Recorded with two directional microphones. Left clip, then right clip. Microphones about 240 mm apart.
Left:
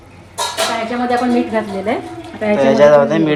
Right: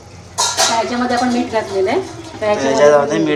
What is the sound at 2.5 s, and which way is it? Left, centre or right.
Speech, centre.